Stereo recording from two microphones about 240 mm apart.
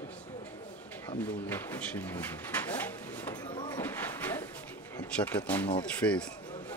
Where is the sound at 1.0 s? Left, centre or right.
Centre.